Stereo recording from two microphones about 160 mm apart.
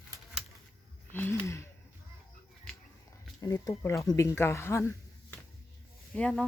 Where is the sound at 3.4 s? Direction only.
20° left (ahead or behind).